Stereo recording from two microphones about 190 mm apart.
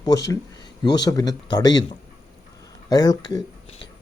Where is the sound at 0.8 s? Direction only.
20° left (ahead or behind).